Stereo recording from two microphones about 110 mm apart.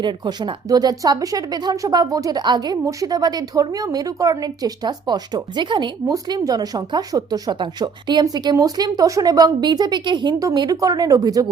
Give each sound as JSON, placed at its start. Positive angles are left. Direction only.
{"t": 0.0, "sound": "speech", "side_deg": -40}
{"t": 6.1, "sound": "speech", "side_deg": -35}